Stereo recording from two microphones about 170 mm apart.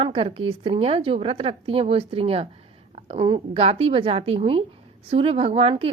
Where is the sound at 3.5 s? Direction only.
35° right (ahead or behind).